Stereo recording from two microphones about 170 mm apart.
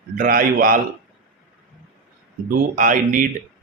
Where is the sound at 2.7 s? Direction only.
50° right (ahead or behind).